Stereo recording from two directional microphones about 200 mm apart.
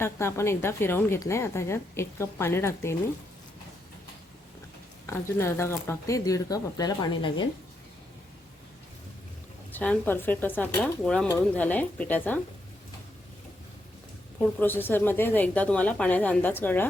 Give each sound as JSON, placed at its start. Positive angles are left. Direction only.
{"t": 0.0, "sound": "a woman's voice", "side_deg": 10}
{"t": 5.0, "sound": "a woman's voice", "side_deg": 10}
{"t": 9.7, "sound": "a woman's voice", "side_deg": 10}
{"t": 14.4, "sound": "a woman's voice", "side_deg": 10}